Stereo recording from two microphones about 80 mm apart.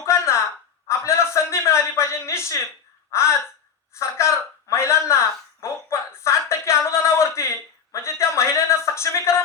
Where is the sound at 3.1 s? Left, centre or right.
Left.